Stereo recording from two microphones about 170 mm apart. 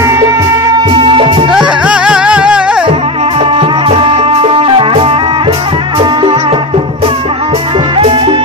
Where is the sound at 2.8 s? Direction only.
35° right (ahead or behind).